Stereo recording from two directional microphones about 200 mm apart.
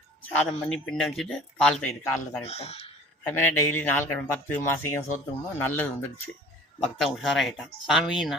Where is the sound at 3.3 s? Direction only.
10° left (ahead or behind).